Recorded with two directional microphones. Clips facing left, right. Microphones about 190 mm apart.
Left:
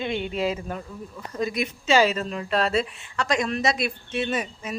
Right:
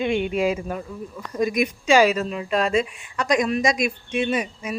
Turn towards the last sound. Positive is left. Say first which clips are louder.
# right 3 dB
turn(degrees=-15)  # may be behind; listen again after turning